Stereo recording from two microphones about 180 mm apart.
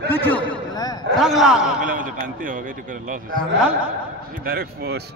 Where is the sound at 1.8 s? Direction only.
50° right (ahead or behind).